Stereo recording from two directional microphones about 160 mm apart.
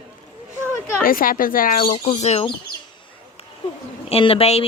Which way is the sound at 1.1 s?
60° left (ahead or behind).